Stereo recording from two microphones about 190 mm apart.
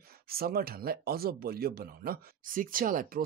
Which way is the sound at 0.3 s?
50° right (ahead or behind).